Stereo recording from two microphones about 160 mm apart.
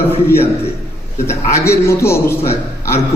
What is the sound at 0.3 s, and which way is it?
A man's voice, 15° left (ahead or behind).